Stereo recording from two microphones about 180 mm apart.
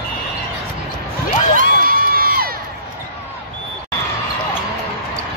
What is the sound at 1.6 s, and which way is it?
Crowd, 55° right (ahead or behind).